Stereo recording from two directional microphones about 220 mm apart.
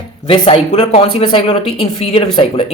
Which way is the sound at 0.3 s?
25° left (ahead or behind).